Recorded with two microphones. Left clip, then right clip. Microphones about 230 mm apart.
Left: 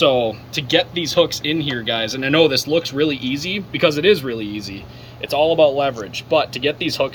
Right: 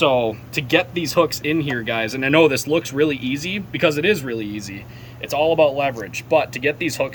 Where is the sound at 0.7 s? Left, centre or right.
Centre.